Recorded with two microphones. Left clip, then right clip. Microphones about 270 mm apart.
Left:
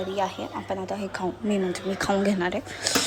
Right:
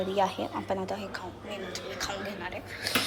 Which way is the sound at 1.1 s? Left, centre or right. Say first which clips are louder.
Left 9 dB; centre.